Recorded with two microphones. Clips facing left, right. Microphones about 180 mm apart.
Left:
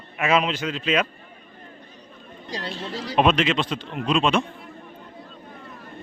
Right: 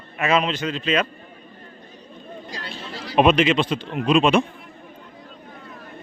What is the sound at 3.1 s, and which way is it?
A man's voice, 5° right (ahead or behind).